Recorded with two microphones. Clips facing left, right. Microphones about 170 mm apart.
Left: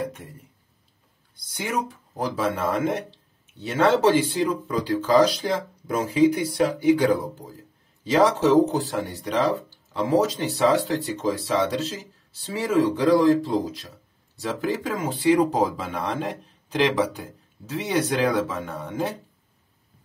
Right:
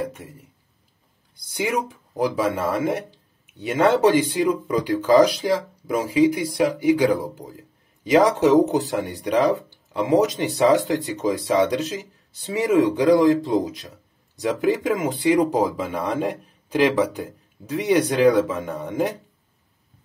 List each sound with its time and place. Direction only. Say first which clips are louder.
0.2 s speech: right 2 dB; 5° right (ahead or behind)
2.1 s speech: right 4 dB; 10° right (ahead or behind)